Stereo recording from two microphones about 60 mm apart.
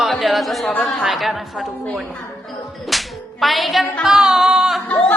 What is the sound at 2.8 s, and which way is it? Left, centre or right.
Whip, centre.